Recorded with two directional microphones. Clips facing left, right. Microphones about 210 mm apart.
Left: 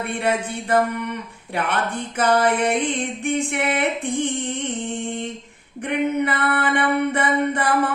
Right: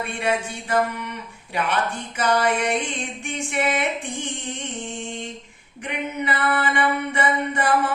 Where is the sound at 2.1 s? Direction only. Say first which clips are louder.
Left 3 dB; 55° left (ahead or behind).